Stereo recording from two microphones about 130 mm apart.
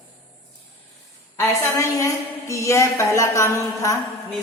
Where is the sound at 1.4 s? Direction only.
20° left (ahead or behind).